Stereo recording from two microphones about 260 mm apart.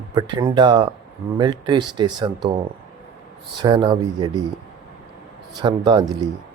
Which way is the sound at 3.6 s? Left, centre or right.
Centre.